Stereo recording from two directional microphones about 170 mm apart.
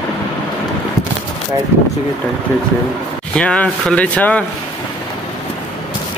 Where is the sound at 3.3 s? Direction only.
5° left (ahead or behind).